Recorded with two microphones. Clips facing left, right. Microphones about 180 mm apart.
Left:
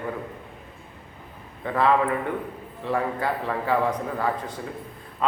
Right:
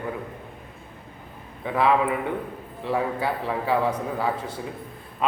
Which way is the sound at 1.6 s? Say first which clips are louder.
Even; 10° right (ahead or behind).